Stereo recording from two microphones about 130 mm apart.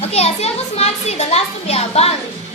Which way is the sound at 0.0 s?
55° left (ahead or behind).